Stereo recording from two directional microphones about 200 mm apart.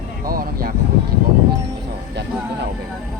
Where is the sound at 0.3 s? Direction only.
45° right (ahead or behind).